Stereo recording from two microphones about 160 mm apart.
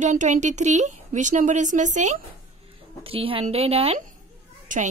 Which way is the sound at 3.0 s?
35° right (ahead or behind).